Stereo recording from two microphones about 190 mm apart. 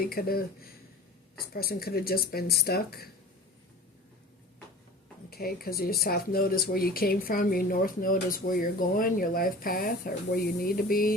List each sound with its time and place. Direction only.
0.0 s speech: 50° left (ahead or behind)
5.3 s speech: 50° left (ahead or behind)